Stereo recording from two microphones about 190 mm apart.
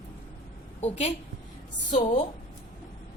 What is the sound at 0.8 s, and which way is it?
A woman's voice, 35° left (ahead or behind).